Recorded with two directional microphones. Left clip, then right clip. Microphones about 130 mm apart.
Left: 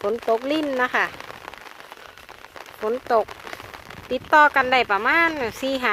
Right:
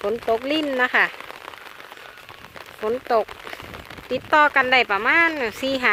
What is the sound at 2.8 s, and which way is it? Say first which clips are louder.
Speech: even; 20° left (ahead or behind).